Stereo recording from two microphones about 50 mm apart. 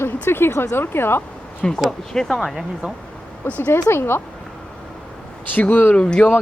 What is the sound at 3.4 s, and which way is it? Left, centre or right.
Speech, left.